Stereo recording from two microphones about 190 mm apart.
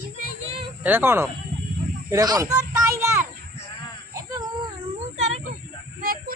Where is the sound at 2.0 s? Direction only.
15° right (ahead or behind).